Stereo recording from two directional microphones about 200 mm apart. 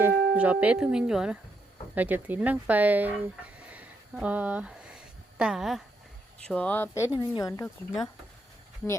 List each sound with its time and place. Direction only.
0.0 s speech: 10° right (ahead or behind); by 7.7 s 20° left (ahead or behind)